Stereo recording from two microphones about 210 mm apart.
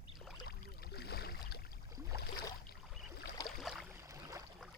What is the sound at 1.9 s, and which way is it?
Boat, 15° right (ahead or behind).